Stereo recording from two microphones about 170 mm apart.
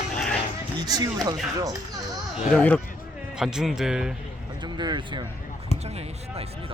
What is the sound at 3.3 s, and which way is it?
Speech, 5° right (ahead or behind).